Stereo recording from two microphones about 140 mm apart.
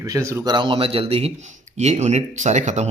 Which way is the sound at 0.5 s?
35° right (ahead or behind).